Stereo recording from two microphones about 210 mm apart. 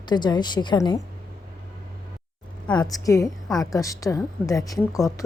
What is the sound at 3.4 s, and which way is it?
Speech, centre (ahead or behind).